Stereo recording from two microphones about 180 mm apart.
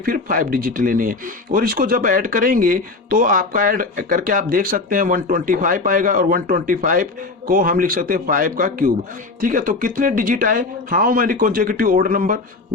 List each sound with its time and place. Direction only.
0.0 s speech: 50° right (ahead or behind)